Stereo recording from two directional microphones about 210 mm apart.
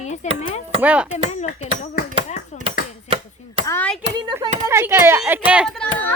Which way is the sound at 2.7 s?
25° right (ahead or behind).